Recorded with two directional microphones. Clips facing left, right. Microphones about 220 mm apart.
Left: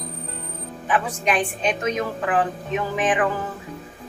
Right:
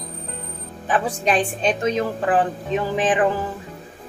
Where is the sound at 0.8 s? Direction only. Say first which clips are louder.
Right 2 dB; 35° right (ahead or behind).